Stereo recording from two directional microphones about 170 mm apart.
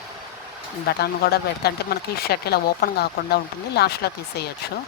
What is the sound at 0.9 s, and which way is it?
Speech, 65° left (ahead or behind).